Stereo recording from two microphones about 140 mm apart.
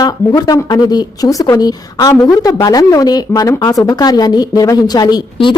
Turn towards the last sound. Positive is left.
turn(degrees=35)  # may be behind; listen again after turning